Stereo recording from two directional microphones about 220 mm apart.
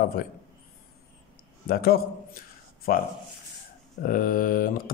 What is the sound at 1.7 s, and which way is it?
A man's voice, 45° left (ahead or behind).